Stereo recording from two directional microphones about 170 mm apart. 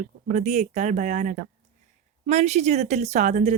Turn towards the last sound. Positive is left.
turn(degrees=-45)  # may be behind; listen again after turning